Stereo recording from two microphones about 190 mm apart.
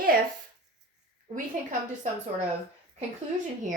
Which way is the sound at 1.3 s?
45° right (ahead or behind).